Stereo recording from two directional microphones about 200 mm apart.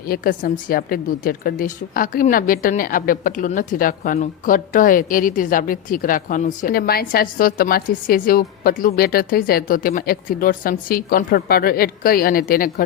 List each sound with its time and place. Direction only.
0.1 s a woman's voice: 45° left (ahead or behind)